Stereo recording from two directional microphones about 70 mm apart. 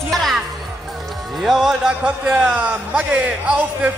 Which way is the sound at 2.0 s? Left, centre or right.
Centre.